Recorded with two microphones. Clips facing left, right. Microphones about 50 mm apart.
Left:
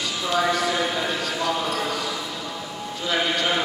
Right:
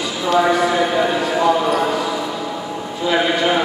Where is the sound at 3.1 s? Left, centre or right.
Right.